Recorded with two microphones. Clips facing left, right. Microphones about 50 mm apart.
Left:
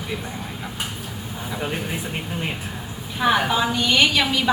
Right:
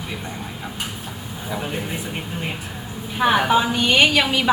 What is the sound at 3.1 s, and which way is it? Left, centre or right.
A woman's voice, centre.